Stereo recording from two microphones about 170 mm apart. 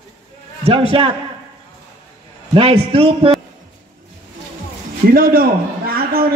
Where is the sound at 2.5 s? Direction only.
35° right (ahead or behind).